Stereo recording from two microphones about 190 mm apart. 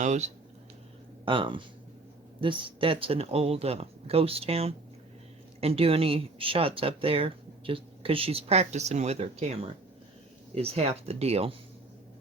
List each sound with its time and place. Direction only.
0.0 s speech: 40° right (ahead or behind)
1.2 s speech: 25° right (ahead or behind)